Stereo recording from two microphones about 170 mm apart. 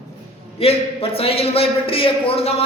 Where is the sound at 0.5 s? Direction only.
35° left (ahead or behind).